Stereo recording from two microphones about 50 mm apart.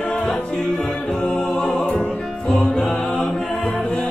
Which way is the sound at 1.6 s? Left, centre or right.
Centre.